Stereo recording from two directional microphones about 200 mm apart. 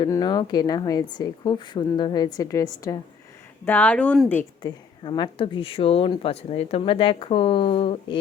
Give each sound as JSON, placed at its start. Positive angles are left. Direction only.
{"t": 0.0, "sound": "speech", "side_deg": 20}
{"t": 4.6, "sound": "speech", "side_deg": 20}